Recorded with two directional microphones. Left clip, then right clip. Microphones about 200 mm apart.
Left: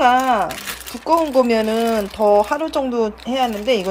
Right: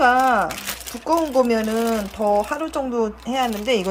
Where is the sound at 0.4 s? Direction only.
15° right (ahead or behind).